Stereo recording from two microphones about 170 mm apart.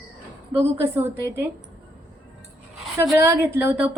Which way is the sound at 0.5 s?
15° right (ahead or behind).